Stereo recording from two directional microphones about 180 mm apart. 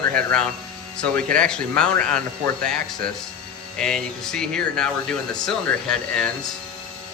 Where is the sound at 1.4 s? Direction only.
5° left (ahead or behind).